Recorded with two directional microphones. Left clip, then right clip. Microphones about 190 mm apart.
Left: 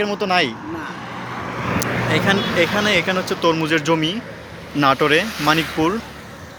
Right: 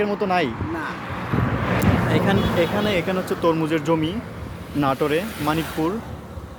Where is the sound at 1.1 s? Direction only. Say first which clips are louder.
Right 2 dB; 30° left (ahead or behind).